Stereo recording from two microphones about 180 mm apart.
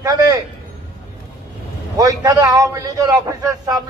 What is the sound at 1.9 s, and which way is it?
A man's voice, 20° right (ahead or behind).